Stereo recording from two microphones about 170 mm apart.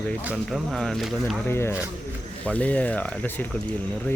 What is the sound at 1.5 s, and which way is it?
Speech, 15° left (ahead or behind).